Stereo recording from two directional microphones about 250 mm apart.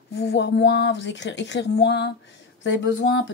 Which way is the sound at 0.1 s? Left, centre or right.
Left.